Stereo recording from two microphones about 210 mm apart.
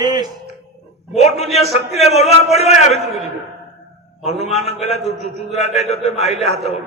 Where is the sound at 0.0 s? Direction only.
20° right (ahead or behind).